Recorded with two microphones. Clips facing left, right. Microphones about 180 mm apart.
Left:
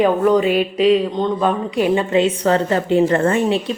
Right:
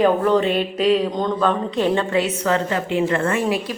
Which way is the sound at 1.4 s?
10° left (ahead or behind).